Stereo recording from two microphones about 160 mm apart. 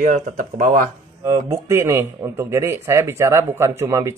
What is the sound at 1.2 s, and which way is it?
Speech, 20° right (ahead or behind).